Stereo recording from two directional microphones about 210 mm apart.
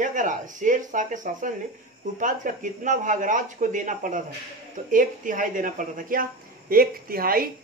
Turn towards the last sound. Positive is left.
turn(degrees=-45)  # may be behind; listen again after turning